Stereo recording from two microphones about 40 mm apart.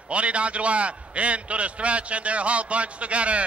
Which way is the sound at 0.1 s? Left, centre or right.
Right.